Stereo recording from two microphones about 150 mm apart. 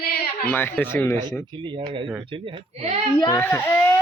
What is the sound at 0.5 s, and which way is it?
Speech, 10° left (ahead or behind).